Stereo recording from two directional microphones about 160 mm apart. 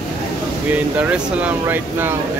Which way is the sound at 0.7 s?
10° right (ahead or behind).